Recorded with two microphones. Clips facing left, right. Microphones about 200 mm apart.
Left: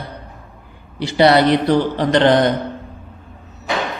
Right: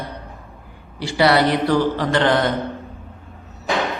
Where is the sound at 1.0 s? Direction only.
20° left (ahead or behind).